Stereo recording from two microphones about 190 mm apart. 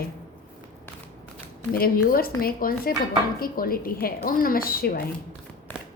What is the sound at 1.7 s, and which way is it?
A woman's voice, 50° left (ahead or behind).